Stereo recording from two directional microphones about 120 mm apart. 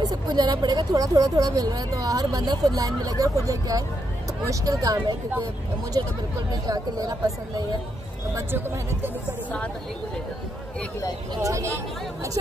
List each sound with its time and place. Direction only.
0.0 s speech: 35° right (ahead or behind)
8.4 s speech: 20° right (ahead or behind)
11.4 s speech: 25° right (ahead or behind)